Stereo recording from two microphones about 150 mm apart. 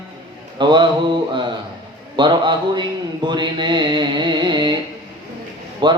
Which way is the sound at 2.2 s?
30° right (ahead or behind).